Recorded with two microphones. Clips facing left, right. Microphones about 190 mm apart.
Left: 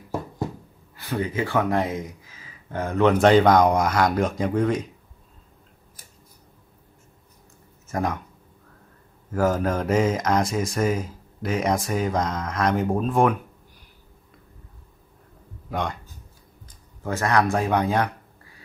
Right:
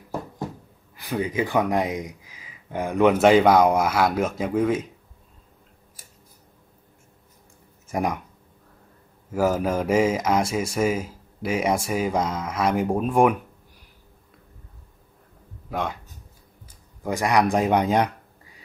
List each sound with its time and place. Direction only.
0.9 s speech: 15° right (ahead or behind)
7.9 s speech: 15° right (ahead or behind)
9.3 s speech: 10° right (ahead or behind)
15.7 s speech: 5° right (ahead or behind)